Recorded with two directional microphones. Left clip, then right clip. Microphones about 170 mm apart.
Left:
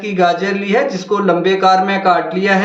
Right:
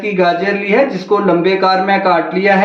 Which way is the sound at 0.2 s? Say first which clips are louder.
Even; 40° right (ahead or behind).